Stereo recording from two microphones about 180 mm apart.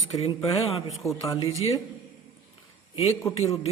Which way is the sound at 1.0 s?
15° left (ahead or behind).